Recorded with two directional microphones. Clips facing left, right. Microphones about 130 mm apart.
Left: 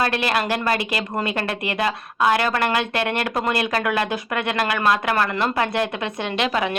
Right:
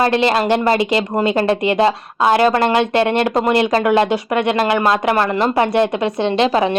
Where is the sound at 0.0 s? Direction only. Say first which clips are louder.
Right 7 dB; 25° right (ahead or behind).